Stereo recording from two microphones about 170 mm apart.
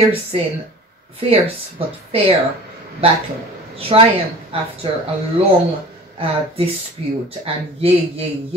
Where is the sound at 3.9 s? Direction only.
30° right (ahead or behind).